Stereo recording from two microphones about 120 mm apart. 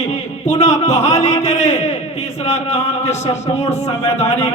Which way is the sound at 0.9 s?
65° left (ahead or behind).